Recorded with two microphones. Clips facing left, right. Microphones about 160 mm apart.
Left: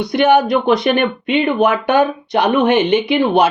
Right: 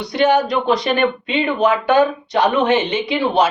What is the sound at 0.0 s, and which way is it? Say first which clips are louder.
Speech: left 3 dB; 55° left (ahead or behind).